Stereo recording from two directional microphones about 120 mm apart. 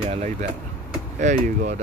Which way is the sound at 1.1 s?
90° right.